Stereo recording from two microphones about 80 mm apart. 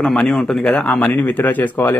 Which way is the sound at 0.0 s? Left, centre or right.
Centre.